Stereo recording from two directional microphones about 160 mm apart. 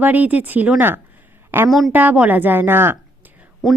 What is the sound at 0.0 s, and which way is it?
A woman's voice, 10° right (ahead or behind).